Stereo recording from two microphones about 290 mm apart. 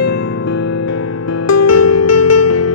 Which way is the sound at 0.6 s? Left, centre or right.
Left.